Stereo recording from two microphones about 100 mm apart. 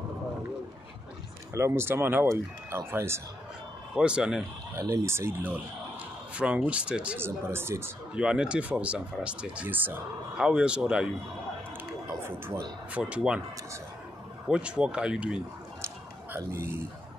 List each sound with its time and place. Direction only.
1.5 s speech: 25° right (ahead or behind)
3.9 s speech: 10° right (ahead or behind)
4.7 s speech: 30° right (ahead or behind); by 7.2 s 10° right (ahead or behind)
7.2 s speech: 25° right (ahead or behind)
8.1 s speech: 10° right (ahead or behind)
10.3 s speech: 5° right (ahead or behind)
12.1 s a sound: 25° right (ahead or behind)
12.9 s speech: 10° right (ahead or behind)
14.5 s speech: 10° right (ahead or behind)
16.3 s speech: 25° right (ahead or behind)